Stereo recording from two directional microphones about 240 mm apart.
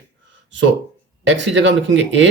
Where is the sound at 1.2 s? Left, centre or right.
Right.